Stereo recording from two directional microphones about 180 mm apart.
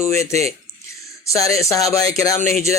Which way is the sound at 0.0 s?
15° left (ahead or behind).